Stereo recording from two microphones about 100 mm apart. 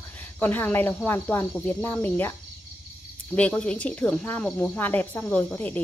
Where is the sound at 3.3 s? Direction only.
10° left (ahead or behind).